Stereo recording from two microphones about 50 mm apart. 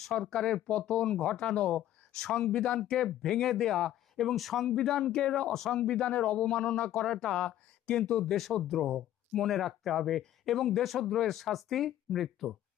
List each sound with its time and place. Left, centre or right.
0.0 s speech: centre
2.6 s speech: centre
4.7 s speech: centre
6.9 s speech: centre
8.2 s speech: centre